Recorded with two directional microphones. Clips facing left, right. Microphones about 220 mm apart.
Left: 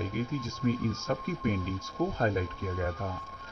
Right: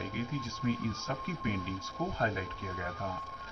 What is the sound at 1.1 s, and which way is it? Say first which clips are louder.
Speech: left 5 dB; 45° left (ahead or behind).